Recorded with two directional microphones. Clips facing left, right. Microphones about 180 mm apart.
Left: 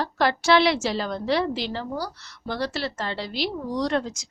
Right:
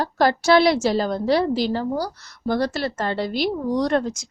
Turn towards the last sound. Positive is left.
turn(degrees=-50)  # may be behind; listen again after turning